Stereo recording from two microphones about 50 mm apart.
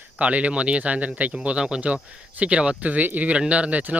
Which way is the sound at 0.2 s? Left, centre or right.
Right.